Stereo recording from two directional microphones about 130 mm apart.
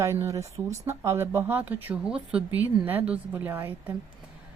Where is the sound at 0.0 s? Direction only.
20° right (ahead or behind).